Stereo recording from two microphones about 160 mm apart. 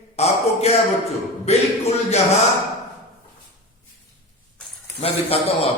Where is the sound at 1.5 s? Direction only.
40° left (ahead or behind).